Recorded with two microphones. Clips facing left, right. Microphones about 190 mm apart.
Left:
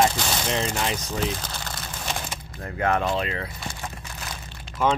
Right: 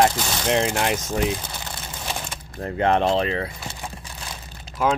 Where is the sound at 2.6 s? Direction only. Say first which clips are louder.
Right 4 dB; 25° right (ahead or behind).